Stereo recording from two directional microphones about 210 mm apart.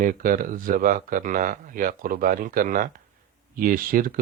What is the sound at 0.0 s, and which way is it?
Speech, 40° right (ahead or behind).